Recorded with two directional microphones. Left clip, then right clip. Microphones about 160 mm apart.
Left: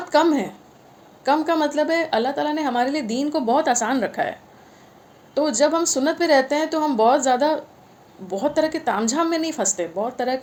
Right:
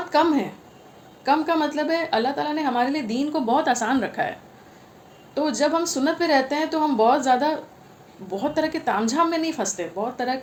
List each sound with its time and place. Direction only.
0.1 s a woman's voice: 50° left (ahead or behind)